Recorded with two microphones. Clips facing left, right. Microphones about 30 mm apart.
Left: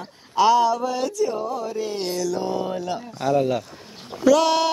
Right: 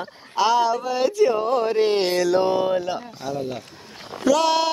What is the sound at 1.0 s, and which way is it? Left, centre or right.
Speech, right.